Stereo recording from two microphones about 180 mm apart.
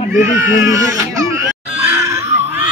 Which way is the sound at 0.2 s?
15° right (ahead or behind).